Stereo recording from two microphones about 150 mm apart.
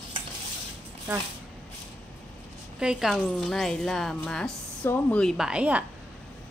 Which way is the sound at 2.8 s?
5° right (ahead or behind).